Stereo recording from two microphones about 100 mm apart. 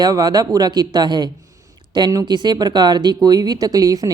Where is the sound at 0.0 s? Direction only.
40° right (ahead or behind).